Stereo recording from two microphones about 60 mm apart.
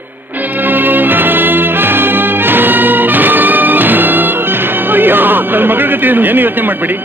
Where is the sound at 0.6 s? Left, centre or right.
Right.